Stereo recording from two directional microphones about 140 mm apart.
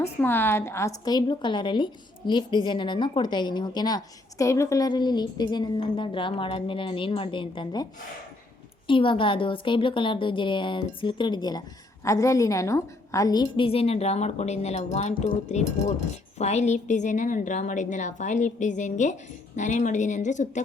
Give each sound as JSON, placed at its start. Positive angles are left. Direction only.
{"t": 0.0, "sound": "a woman's voice", "side_deg": 15}
{"t": 8.9, "sound": "a woman's voice", "side_deg": 35}